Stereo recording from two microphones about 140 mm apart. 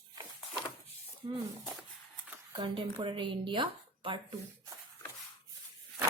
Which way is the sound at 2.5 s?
35° right (ahead or behind).